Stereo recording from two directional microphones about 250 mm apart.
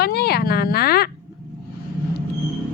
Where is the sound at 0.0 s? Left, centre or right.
Left.